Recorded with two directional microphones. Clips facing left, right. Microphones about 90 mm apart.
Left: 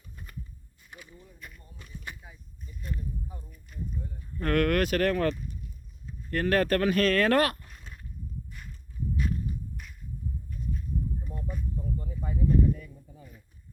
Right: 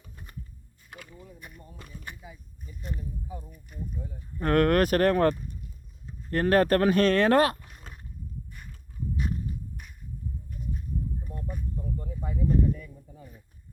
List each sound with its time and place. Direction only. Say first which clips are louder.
0.9 s speech: right 3 dB; 65° right (ahead or behind)
1.4 s speech: right 1 dB; 20° right (ahead or behind)
1.7 s speech: right 2 dB; 50° right (ahead or behind)
4.4 s speech: right 3 dB; 30° right (ahead or behind)
9.1 s horse: even; 20° right (ahead or behind)
11.9 s speech: right 1 dB; 50° right (ahead or behind)
12.5 s a sound: even; 40° right (ahead or behind)